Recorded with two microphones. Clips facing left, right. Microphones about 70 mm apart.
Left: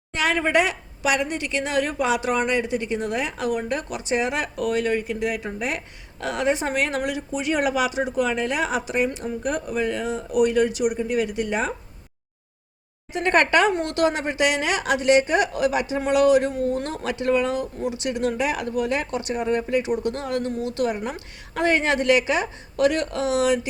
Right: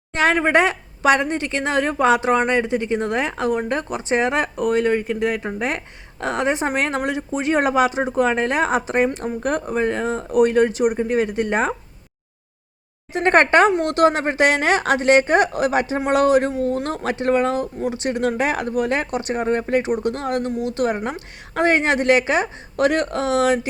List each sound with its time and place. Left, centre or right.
0.1 s a sound: right
0.3 s a woman's voice: right
13.1 s a woman's voice: right